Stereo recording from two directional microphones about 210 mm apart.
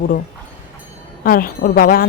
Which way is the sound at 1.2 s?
45° left (ahead or behind).